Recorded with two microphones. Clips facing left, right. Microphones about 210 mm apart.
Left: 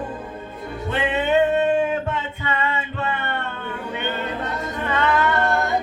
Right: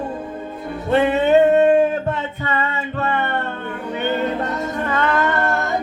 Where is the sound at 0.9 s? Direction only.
40° right (ahead or behind).